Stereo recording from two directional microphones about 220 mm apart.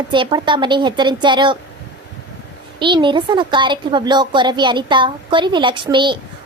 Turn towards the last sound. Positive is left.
turn(degrees=-20)  # may be behind; listen again after turning